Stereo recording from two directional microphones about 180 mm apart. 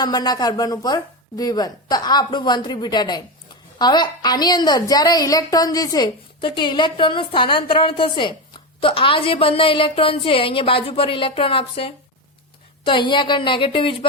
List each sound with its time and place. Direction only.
0.0 s a woman's voice: 20° left (ahead or behind)